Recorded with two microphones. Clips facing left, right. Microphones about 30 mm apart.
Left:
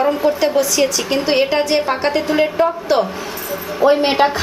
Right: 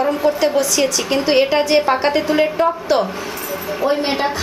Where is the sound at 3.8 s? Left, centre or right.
Centre.